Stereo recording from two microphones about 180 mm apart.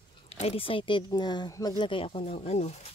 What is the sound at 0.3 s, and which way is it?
Speech, 35° left (ahead or behind).